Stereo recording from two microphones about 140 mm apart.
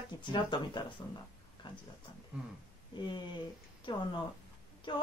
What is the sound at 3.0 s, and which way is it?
Speech, 35° left (ahead or behind).